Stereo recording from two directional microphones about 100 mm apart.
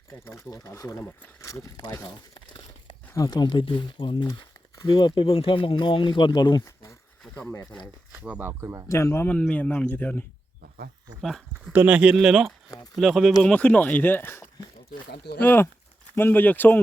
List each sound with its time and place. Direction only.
0.2 s speech: 35° left (ahead or behind)
2.0 s crumpling: 50° left (ahead or behind)
3.2 s speech: 45° left (ahead or behind)
7.3 s speech: 20° left (ahead or behind)
8.1 s speech: 15° right (ahead or behind)
8.9 s speech: 30° left (ahead or behind)
9.3 s speech: 15° left (ahead or behind)
11.2 s speech: centre (ahead or behind)
11.7 s speech: 15° right (ahead or behind)
12.7 s speech: 40° left (ahead or behind)
13.0 s speech: centre (ahead or behind)
13.4 s speech: 15° left (ahead or behind)